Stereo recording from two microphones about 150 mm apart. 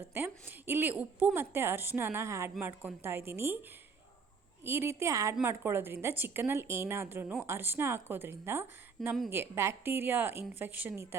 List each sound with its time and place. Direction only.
0.1 s a woman's voice: 15° right (ahead or behind)
4.6 s a woman's voice: 15° right (ahead or behind)
9.0 s a woman's voice: centre (ahead or behind)
9.3 s a woman's voice: 15° right (ahead or behind)